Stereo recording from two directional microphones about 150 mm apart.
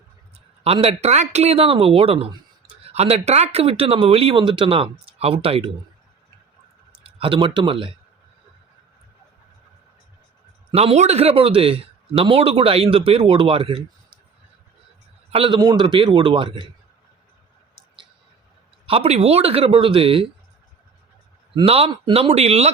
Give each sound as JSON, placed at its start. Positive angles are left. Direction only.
{"t": 0.6, "sound": "speech", "side_deg": -40}
{"t": 7.0, "sound": "speech", "side_deg": -35}
{"t": 10.8, "sound": "speech", "side_deg": -45}
{"t": 15.3, "sound": "speech", "side_deg": -35}
{"t": 18.9, "sound": "speech", "side_deg": -40}
{"t": 21.5, "sound": "speech", "side_deg": -40}